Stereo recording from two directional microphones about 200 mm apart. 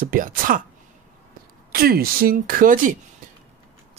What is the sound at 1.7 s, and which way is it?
Speech, 50° right (ahead or behind).